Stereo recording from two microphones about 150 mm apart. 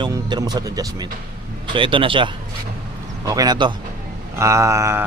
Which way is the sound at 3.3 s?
25° right (ahead or behind).